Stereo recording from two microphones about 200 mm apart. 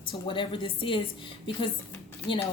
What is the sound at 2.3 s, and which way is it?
Speech, 25° left (ahead or behind).